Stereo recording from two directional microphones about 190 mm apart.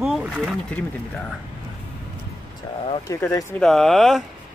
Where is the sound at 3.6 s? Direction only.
Centre (ahead or behind).